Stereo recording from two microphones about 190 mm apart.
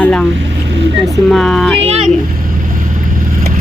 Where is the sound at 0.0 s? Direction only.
5° left (ahead or behind).